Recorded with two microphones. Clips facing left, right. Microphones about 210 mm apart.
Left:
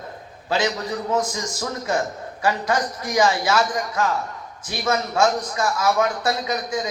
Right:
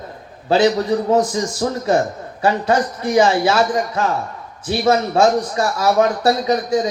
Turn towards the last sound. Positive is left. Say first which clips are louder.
# right 8 dB
turn(degrees=-35)  # may be behind; listen again after turning